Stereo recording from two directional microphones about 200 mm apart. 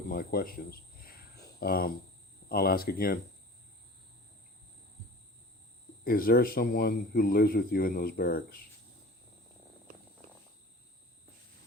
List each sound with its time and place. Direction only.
0.1 s speech: 50° left (ahead or behind)
6.1 s speech: 45° left (ahead or behind)